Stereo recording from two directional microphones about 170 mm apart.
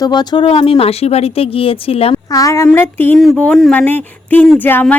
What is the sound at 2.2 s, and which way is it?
A woman's voice, 20° left (ahead or behind).